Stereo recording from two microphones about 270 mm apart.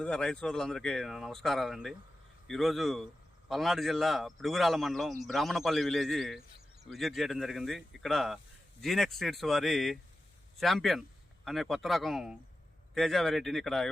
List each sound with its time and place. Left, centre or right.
0.0 s speech: centre